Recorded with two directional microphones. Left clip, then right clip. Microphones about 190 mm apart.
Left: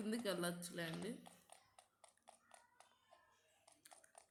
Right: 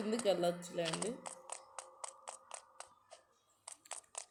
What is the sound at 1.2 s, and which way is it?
Music, 55° right (ahead or behind).